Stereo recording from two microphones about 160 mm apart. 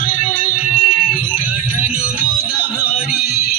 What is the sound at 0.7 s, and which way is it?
Music, 60° left (ahead or behind).